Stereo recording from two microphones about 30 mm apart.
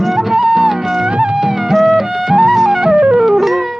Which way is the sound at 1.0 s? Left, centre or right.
Right.